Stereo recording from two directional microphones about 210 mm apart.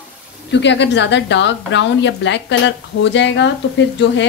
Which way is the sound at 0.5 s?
55° left (ahead or behind).